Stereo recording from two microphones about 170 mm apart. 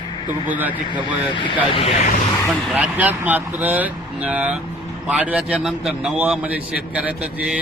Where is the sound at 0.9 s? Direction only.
30° left (ahead or behind).